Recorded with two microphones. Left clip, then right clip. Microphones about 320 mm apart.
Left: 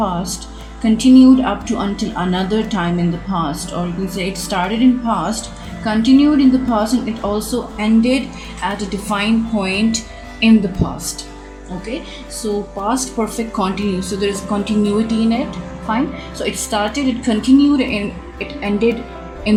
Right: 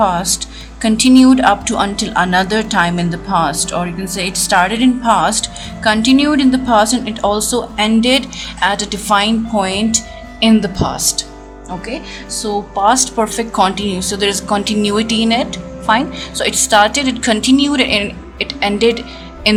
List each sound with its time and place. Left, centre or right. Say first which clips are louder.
0.0 s music: right 7 dB; right
0.8 s a woman's voice: right 1 dB; right
12.8 s a woman's voice: right 9 dB; right